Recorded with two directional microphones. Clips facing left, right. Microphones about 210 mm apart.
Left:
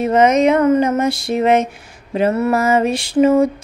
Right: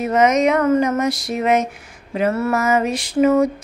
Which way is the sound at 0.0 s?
30° left (ahead or behind).